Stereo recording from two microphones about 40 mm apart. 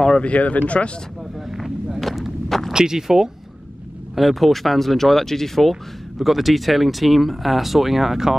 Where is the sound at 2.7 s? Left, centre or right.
Centre.